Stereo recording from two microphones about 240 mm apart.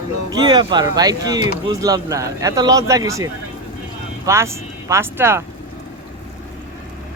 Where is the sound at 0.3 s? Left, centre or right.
Centre.